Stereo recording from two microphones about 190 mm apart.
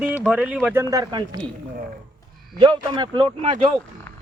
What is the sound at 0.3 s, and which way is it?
Speech, 5° right (ahead or behind).